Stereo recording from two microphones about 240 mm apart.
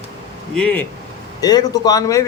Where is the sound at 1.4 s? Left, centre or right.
Centre.